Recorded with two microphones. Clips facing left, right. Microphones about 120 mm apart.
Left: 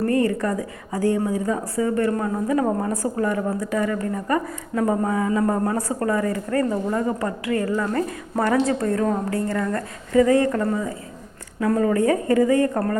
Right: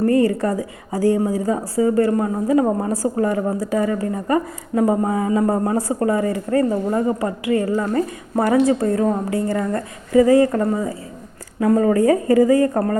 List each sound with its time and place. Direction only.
0.0 s a man's voice: 30° right (ahead or behind)